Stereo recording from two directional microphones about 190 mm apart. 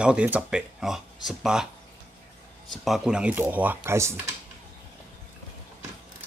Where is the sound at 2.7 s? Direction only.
Centre (ahead or behind).